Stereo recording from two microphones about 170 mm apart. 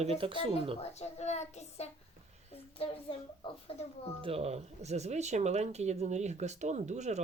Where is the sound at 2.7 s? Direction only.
35° left (ahead or behind).